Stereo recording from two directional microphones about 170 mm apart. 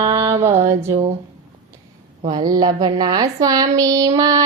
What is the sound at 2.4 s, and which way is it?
A woman's voice, 25° right (ahead or behind).